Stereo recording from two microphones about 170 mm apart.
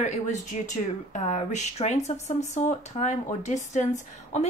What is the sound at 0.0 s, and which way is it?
Speech, 45° left (ahead or behind).